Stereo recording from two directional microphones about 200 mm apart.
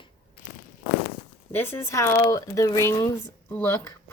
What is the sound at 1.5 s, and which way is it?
Speech, 10° left (ahead or behind).